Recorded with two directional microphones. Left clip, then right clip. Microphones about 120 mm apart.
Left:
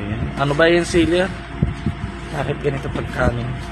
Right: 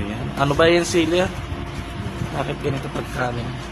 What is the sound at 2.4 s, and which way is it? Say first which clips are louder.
Speech: left 3 dB; centre (ahead or behind).